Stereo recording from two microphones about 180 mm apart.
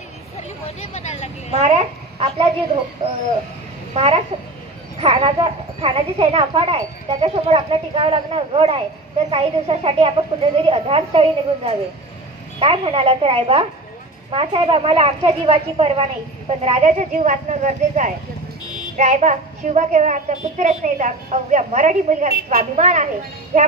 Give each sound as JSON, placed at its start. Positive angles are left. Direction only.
{"t": 0.4, "sound": "a sound", "side_deg": 35}
{"t": 1.6, "sound": "a woman's voice", "side_deg": -35}
{"t": 3.9, "sound": "a child's voice", "side_deg": -35}